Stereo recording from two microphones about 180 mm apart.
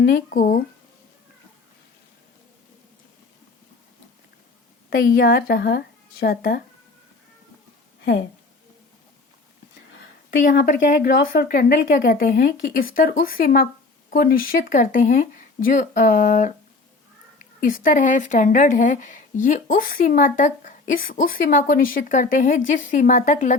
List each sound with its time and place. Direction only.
0.0 s a woman's voice: 55° left (ahead or behind)
4.9 s speech: 55° left (ahead or behind)
8.0 s a woman's voice: 70° left (ahead or behind)
10.7 s a woman's voice: 55° left (ahead or behind)
17.6 s a woman's voice: 50° left (ahead or behind)